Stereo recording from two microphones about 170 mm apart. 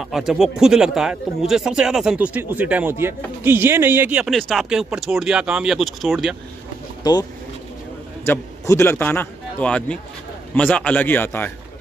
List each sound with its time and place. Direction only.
0.0 s speech: 5° right (ahead or behind)
7.0 s speech: 25° left (ahead or behind)
8.3 s a man's voice: 15° left (ahead or behind)